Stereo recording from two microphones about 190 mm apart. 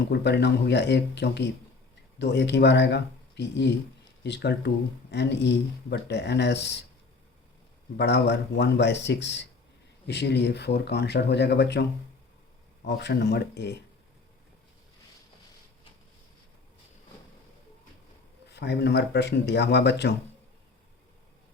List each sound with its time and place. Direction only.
0.1 s speech: 60° left (ahead or behind)
7.9 s speech: 65° left (ahead or behind)
18.4 s speech: 60° left (ahead or behind)